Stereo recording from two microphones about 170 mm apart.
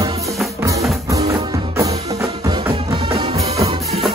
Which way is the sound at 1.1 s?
20° right (ahead or behind).